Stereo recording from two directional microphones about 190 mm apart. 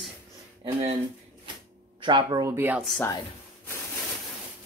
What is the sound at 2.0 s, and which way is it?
Speech, 25° right (ahead or behind).